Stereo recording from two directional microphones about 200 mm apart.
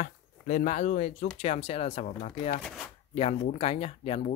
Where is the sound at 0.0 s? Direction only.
40° left (ahead or behind).